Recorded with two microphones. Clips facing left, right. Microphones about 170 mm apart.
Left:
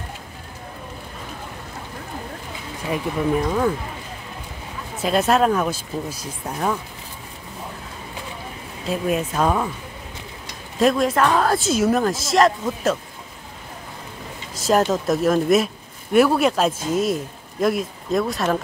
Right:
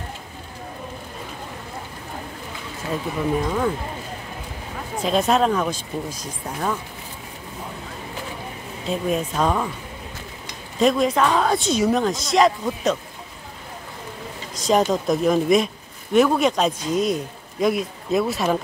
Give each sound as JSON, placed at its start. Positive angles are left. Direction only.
{"t": 2.9, "sound": "speech", "side_deg": 10}
{"t": 5.0, "sound": "speech", "side_deg": 5}
{"t": 8.8, "sound": "speech", "side_deg": 5}
{"t": 10.8, "sound": "speech", "side_deg": 0}
{"t": 14.5, "sound": "a sound", "side_deg": 5}
{"t": 14.8, "sound": "speech", "side_deg": 0}